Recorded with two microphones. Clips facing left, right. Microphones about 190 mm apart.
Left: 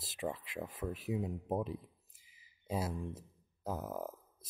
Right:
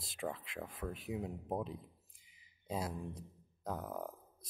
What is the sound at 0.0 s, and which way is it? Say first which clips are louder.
Speech: left 2 dB; centre (ahead or behind).